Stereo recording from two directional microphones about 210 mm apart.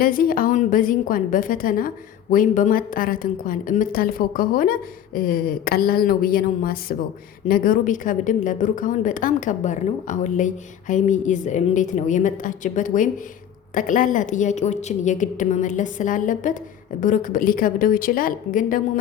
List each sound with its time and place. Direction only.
0.0 s a woman's voice: 45° left (ahead or behind)